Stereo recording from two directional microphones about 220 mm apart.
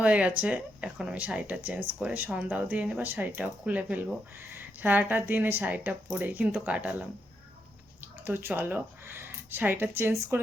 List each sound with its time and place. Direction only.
0.0 s speech: 5° right (ahead or behind)
8.0 s speech: 10° right (ahead or behind)